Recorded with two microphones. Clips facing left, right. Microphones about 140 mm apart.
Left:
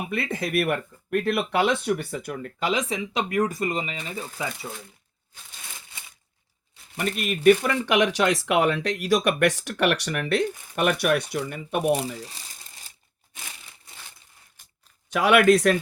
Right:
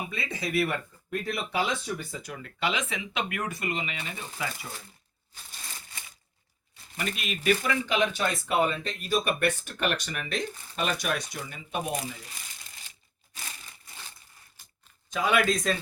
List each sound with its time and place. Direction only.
0.1 s speech: 55° left (ahead or behind); by 4.4 s 35° left (ahead or behind)
6.9 s speech: 50° left (ahead or behind)
7.8 s speech: 85° left; by 11.9 s 65° left (ahead or behind)
11.9 s speech: 30° left (ahead or behind)
15.1 s speech: 70° left (ahead or behind)